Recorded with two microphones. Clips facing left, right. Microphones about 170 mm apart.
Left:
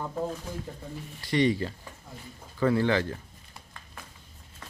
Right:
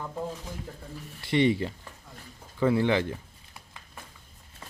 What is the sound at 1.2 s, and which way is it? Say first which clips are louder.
A man's voice: right 1 dB; 25° right (ahead or behind).